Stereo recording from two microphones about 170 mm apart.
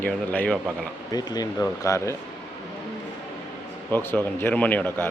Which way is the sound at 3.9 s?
10° left (ahead or behind).